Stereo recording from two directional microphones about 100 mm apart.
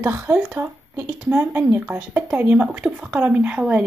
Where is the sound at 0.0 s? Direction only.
25° right (ahead or behind).